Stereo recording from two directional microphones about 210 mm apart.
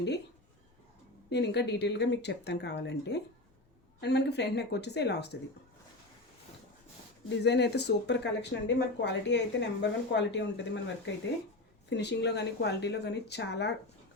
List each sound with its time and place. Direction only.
1.3 s speech: 55° left (ahead or behind)
7.3 s speech: 55° left (ahead or behind)